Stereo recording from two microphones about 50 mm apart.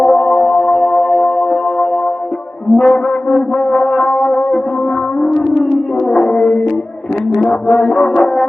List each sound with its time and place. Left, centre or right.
0.0 s music: centre
6.1 s music: centre